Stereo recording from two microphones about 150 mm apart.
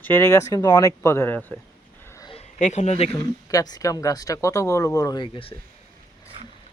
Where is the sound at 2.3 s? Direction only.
50° left (ahead or behind).